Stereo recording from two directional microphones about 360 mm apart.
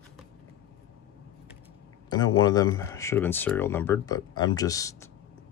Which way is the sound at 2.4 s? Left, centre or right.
Centre.